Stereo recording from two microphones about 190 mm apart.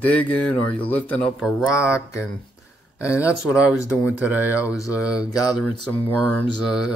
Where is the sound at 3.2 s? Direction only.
5° right (ahead or behind).